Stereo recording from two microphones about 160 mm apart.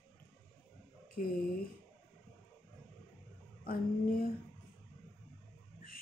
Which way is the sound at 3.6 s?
65° left (ahead or behind).